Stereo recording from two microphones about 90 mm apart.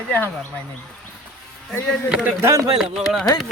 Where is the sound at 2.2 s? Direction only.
30° right (ahead or behind).